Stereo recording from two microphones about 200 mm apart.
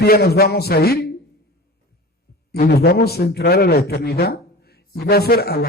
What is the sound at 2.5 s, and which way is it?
A man's voice, 50° left (ahead or behind).